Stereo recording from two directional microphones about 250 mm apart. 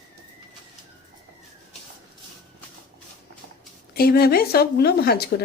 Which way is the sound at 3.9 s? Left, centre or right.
Left.